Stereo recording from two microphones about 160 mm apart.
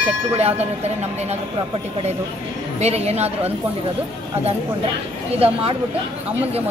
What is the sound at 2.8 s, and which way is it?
Speech, 40° right (ahead or behind).